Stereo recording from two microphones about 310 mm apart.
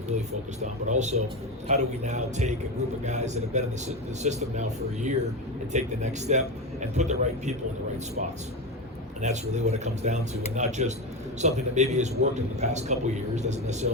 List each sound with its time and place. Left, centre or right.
0.6 s a man's voice: right
5.7 s a man's voice: right
9.2 s a man's voice: right